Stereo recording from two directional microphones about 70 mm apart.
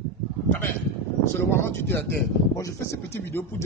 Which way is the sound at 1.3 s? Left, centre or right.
Left.